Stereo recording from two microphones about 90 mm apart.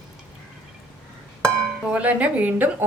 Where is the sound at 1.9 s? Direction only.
15° right (ahead or behind).